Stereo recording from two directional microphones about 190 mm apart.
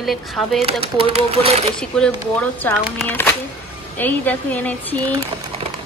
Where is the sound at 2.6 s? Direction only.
10° left (ahead or behind).